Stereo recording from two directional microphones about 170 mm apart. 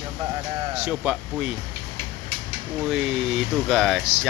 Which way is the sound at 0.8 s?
5° right (ahead or behind).